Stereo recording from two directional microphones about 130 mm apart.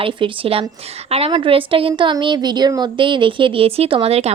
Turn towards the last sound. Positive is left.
turn(degrees=-50)  # may be behind; listen again after turning